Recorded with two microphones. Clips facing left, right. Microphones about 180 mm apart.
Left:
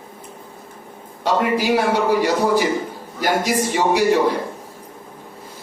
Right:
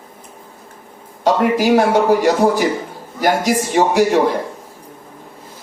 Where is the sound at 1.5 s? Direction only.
45° right (ahead or behind).